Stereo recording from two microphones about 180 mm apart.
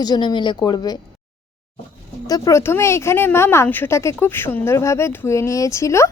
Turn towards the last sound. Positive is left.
turn(degrees=15)  # may be behind; listen again after turning